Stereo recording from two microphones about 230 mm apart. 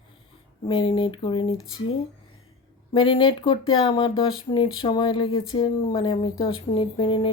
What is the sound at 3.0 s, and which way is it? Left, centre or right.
A woman's voice, left.